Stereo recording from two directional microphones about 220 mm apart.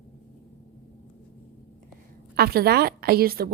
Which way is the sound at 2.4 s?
45° right (ahead or behind).